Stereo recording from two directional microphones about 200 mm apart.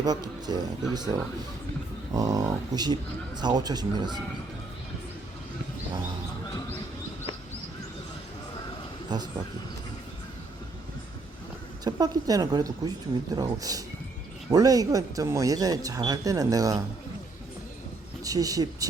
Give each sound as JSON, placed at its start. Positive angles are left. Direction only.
{"t": 0.0, "sound": "speech", "side_deg": -20}
{"t": 9.0, "sound": "speech", "side_deg": -20}
{"t": 11.9, "sound": "speech", "side_deg": -20}
{"t": 18.2, "sound": "speech", "side_deg": -15}